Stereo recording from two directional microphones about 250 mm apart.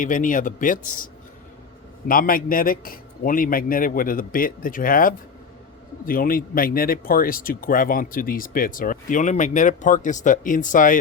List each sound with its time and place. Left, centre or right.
0.0 s speech: left
2.0 s speech: left